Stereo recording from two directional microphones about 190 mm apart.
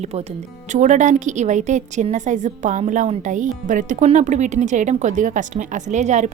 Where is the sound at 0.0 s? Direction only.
35° right (ahead or behind).